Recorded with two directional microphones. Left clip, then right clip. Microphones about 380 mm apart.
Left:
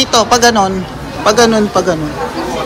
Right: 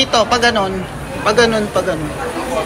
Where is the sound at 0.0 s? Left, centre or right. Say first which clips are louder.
Left 4 dB; centre.